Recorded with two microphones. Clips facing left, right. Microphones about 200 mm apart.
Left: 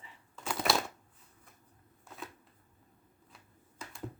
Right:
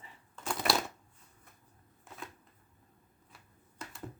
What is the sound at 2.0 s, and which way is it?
Shuffling cards, centre (ahead or behind).